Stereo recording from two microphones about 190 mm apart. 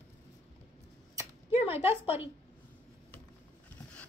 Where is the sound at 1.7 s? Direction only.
10° right (ahead or behind).